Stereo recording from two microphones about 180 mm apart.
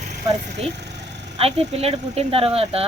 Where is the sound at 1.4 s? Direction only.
35° right (ahead or behind).